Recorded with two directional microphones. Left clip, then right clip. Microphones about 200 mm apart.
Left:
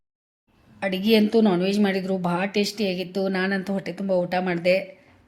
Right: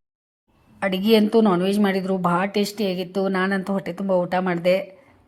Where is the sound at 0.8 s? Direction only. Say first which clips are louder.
Right 2 dB; 10° right (ahead or behind).